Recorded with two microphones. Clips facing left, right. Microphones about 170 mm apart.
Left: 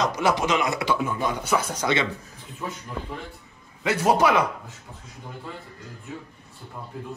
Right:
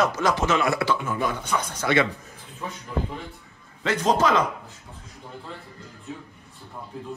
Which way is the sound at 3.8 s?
10° left (ahead or behind).